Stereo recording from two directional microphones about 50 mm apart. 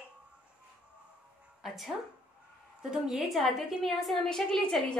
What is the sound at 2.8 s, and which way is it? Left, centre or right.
A woman's voice, centre.